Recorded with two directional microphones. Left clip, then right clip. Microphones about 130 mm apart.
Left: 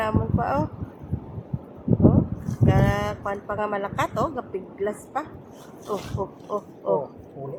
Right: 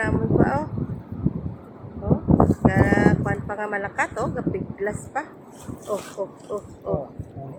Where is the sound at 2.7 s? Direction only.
20° left (ahead or behind).